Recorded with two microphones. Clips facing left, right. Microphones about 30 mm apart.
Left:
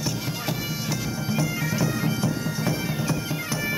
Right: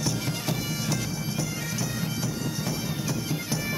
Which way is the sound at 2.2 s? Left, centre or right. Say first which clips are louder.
Left 6 dB; left.